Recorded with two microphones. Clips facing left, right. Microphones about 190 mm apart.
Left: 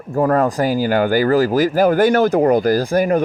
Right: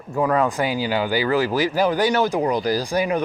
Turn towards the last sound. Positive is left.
turn(degrees=50)  # may be behind; listen again after turning